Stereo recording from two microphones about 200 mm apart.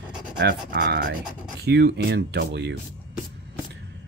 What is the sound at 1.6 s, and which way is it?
Speech, 55° right (ahead or behind).